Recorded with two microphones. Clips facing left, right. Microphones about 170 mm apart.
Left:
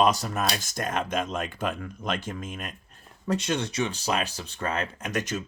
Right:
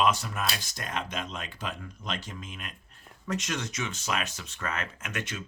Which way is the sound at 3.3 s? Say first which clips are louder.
Left 5 dB; 30° left (ahead or behind).